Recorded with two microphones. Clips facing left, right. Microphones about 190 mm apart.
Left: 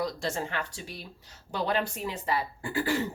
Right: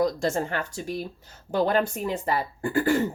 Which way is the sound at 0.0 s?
45° right (ahead or behind).